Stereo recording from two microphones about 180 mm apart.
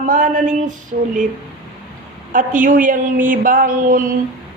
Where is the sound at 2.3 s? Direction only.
45° right (ahead or behind).